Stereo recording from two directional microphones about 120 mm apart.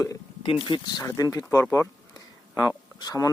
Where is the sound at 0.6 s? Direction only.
40° left (ahead or behind).